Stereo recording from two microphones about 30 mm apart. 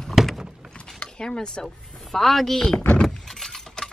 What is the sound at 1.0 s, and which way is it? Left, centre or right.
Speech, left.